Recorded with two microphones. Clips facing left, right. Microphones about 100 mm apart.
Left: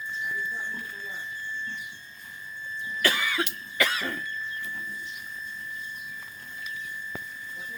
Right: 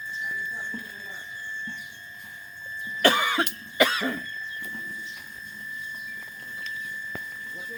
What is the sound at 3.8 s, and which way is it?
Cough, 20° right (ahead or behind).